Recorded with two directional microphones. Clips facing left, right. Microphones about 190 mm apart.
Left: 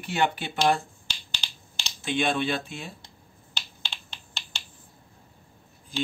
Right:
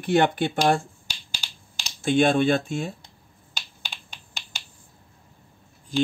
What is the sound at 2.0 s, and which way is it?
Speech, 45° right (ahead or behind).